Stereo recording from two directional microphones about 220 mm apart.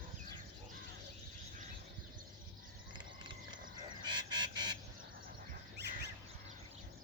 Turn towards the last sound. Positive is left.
turn(degrees=-50)  # may be behind; listen again after turning